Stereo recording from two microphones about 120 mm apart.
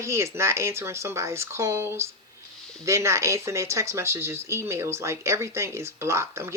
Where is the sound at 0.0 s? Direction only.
25° right (ahead or behind).